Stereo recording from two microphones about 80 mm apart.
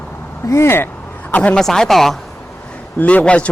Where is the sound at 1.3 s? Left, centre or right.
Centre.